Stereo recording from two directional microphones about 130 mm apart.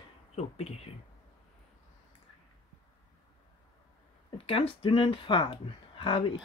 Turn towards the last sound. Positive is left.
turn(degrees=40)  # may be behind; listen again after turning